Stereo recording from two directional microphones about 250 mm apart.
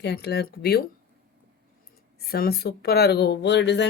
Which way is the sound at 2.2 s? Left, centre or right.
Left.